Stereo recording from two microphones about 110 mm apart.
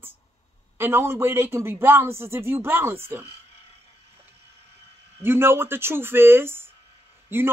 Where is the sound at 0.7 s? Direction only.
20° right (ahead or behind).